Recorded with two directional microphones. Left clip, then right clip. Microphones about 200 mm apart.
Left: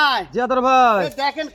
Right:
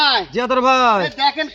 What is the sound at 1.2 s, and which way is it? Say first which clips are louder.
Speech: right 4 dB; 30° left (ahead or behind).